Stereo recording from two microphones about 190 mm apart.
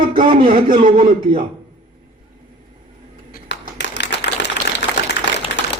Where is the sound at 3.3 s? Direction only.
65° left (ahead or behind).